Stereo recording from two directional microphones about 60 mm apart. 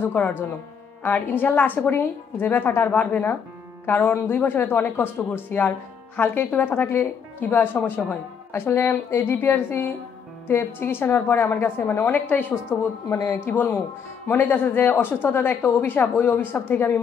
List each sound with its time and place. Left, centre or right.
0.0 s a woman's voice: left